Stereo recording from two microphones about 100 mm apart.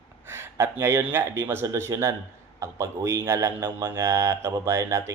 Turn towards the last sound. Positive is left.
turn(degrees=-30)  # may be behind; listen again after turning